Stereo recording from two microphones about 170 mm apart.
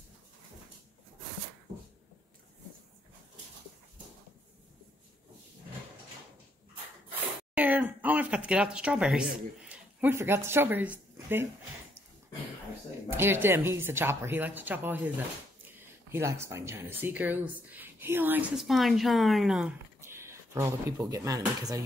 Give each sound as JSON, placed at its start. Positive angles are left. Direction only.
{"t": 7.5, "sound": "speech", "side_deg": -10}
{"t": 13.1, "sound": "speech", "side_deg": -15}
{"t": 20.0, "sound": "speech", "side_deg": -15}